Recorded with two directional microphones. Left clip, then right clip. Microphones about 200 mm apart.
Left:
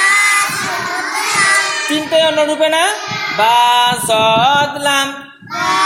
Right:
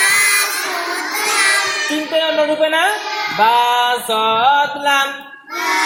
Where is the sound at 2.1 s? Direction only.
50° left (ahead or behind).